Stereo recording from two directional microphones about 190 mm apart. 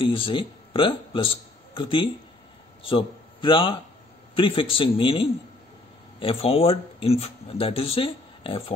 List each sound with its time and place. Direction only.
0.0 s a man's voice: 30° left (ahead or behind)